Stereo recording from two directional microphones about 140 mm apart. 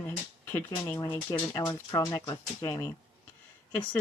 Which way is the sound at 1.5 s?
30° left (ahead or behind).